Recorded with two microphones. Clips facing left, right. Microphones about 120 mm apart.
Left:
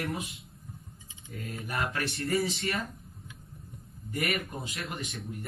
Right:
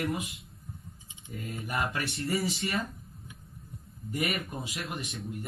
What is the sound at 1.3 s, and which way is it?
Speech, 5° right (ahead or behind).